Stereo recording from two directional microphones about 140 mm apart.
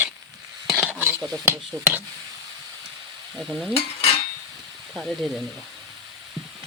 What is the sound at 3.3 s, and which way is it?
Speech, centre (ahead or behind).